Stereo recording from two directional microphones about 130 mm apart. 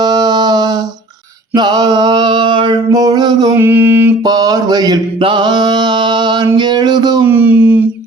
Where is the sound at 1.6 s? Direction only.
35° right (ahead or behind).